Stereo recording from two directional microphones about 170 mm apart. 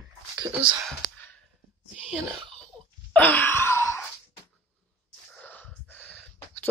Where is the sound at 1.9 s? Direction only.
5° right (ahead or behind).